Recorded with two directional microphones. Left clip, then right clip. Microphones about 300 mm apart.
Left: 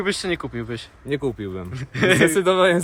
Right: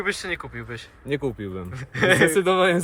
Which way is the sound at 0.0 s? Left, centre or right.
Centre.